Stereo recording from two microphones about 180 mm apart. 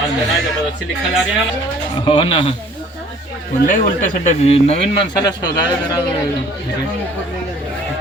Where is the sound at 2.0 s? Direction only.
25° left (ahead or behind).